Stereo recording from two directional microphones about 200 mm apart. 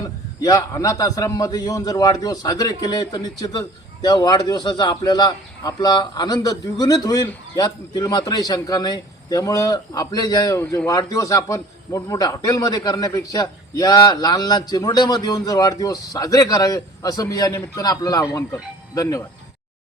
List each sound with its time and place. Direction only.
0.4 s a man's voice: 15° left (ahead or behind)